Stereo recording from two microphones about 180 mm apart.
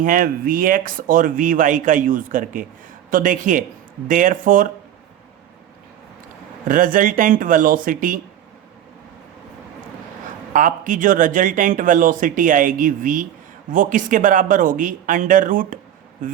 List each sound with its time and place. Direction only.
0.0 s speech: 50° right (ahead or behind)
6.7 s speech: 50° right (ahead or behind)
10.5 s speech: 45° right (ahead or behind)